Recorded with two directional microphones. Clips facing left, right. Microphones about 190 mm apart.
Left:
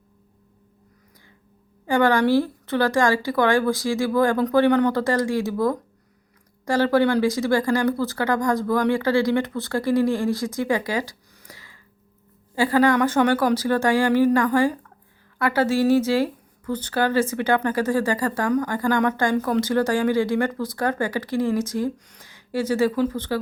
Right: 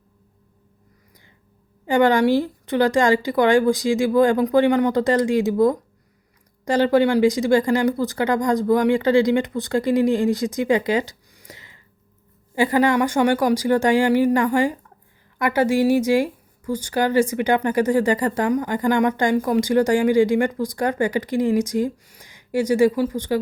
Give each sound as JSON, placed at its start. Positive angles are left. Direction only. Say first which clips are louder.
{"t": 1.9, "sound": "speech", "louder": "right 2 dB", "side_deg": -15}